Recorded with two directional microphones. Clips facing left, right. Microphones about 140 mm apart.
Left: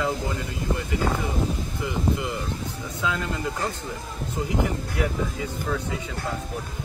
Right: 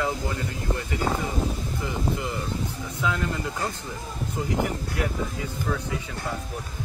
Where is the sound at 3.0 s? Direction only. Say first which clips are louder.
Even; 20° left (ahead or behind).